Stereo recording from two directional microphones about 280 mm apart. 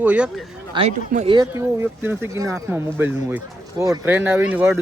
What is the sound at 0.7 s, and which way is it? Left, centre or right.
Speech, centre.